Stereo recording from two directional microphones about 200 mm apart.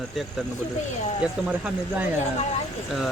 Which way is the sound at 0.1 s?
Centre (ahead or behind).